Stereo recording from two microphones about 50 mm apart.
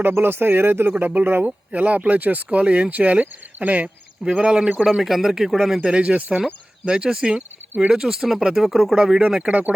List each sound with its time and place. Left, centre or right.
0.0 s speech: right
1.5 s speech: right
5.0 s speech: centre
5.8 s speech: right
6.8 s speech: centre
9.5 s speech: right